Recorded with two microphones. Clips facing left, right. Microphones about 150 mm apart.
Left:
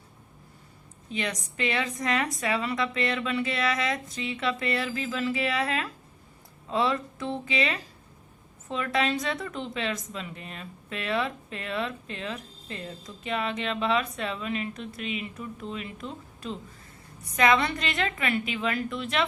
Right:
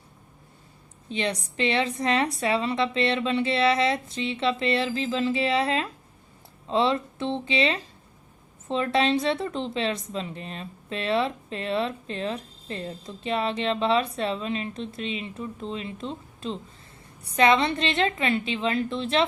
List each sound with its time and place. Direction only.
1.1 s a woman's voice: 30° right (ahead or behind)